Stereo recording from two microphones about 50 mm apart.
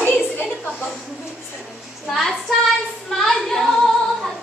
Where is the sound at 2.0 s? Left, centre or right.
Centre.